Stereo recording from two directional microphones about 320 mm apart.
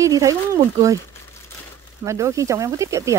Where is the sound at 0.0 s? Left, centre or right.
Centre.